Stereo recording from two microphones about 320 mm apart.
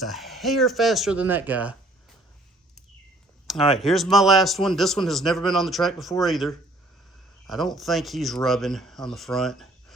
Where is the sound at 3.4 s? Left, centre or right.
Centre.